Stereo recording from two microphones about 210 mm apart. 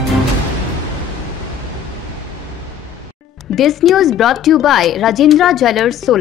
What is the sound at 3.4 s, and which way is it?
Speech, centre (ahead or behind).